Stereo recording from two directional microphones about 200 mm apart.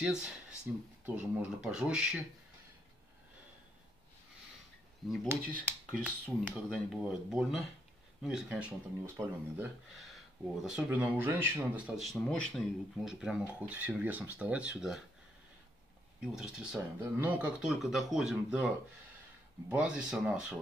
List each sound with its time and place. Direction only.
0.7 s speech: 5° right (ahead or behind)
5.1 s speech: 5° left (ahead or behind)
16.2 s speech: 5° right (ahead or behind)
19.7 s speech: 5° right (ahead or behind)